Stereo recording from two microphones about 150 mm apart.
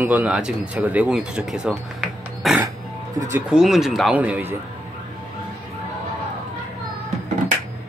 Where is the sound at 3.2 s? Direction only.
15° right (ahead or behind).